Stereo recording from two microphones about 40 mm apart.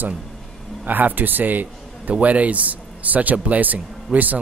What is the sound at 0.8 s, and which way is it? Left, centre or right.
A man's voice, right.